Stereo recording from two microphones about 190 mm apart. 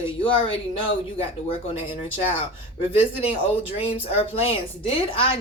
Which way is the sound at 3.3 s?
30° left (ahead or behind).